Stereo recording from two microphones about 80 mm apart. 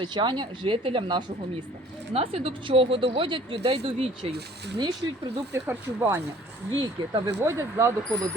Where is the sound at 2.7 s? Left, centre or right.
Right.